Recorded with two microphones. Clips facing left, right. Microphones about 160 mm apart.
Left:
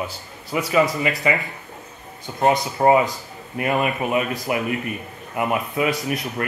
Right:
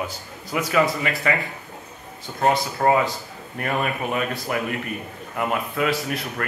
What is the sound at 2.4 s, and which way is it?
Speech, 15° left (ahead or behind).